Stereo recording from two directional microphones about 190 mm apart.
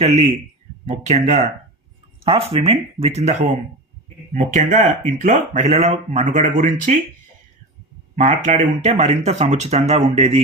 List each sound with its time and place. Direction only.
0.0 s speech: 35° right (ahead or behind)
8.1 s speech: 35° right (ahead or behind)